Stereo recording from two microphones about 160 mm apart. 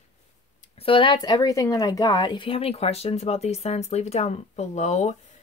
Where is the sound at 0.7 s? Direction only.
35° left (ahead or behind).